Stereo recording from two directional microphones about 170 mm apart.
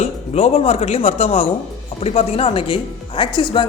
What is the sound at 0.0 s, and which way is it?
Speech, 35° left (ahead or behind).